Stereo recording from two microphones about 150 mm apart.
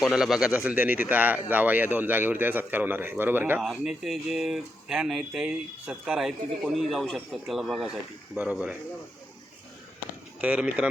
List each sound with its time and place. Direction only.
0.0 s speech: 5° right (ahead or behind)
3.6 s speech: centre (ahead or behind)
10.4 s speech: 10° right (ahead or behind)